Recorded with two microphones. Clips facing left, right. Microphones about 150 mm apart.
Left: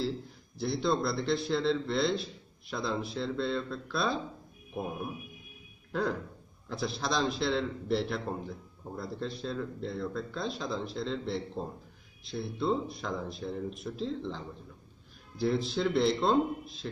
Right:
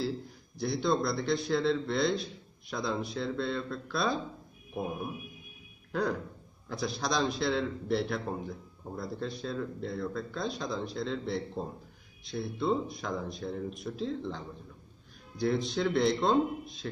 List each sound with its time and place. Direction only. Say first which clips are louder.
0.6 s a man's voice: even; centre (ahead or behind)
5.9 s music: even; centre (ahead or behind)
6.7 s a man's voice: even; centre (ahead or behind)